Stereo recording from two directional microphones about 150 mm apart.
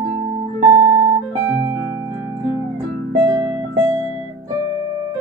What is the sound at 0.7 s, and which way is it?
Music, 15° right (ahead or behind).